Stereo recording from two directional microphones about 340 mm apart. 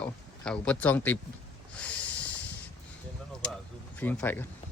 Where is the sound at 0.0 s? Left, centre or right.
Centre.